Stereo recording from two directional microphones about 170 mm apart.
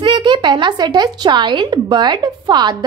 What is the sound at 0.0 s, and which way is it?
Speech, 25° right (ahead or behind).